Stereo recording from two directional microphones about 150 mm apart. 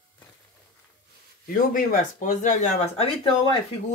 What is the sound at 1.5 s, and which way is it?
Speech, 65° left (ahead or behind).